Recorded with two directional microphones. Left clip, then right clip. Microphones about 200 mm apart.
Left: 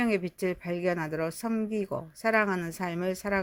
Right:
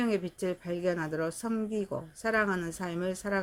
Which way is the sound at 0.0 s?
35° left (ahead or behind).